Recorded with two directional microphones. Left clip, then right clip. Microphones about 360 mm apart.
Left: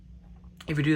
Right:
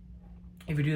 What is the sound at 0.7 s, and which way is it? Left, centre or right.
Speech, centre.